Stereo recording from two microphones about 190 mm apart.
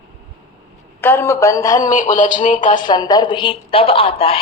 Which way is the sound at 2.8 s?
20° left (ahead or behind).